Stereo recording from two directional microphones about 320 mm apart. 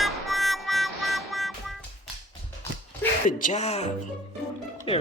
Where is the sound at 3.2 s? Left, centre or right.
Left.